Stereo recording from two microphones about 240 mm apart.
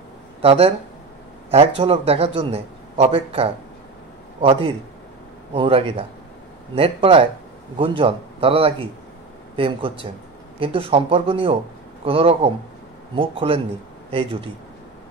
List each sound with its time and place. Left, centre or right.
0.4 s a man's voice: right